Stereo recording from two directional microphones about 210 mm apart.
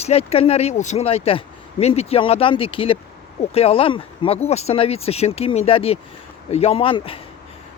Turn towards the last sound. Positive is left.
turn(degrees=25)  # may be behind; listen again after turning